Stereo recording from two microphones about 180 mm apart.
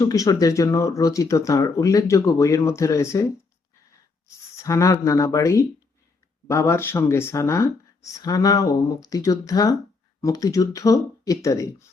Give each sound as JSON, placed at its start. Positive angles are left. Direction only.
{"t": 0.0, "sound": "speech", "side_deg": 20}
{"t": 4.5, "sound": "speech", "side_deg": 15}